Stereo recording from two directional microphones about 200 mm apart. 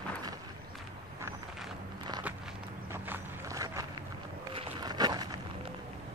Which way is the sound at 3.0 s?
15° right (ahead or behind).